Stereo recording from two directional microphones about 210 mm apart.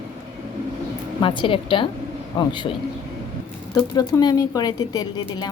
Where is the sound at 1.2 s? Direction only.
25° left (ahead or behind).